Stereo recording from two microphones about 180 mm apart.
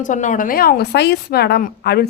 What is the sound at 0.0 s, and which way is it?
A woman's voice, 45° left (ahead or behind).